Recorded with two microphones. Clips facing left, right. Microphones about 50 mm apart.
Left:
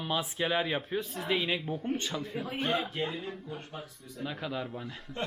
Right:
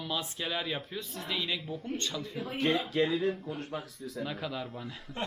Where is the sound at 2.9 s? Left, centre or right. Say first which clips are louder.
Right 7 dB; right.